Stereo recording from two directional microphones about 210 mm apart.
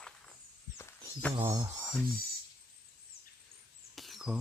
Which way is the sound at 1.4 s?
15° right (ahead or behind).